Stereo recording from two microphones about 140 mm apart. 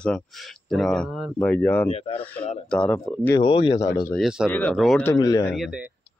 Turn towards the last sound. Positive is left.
turn(degrees=25)  # may be behind; listen again after turning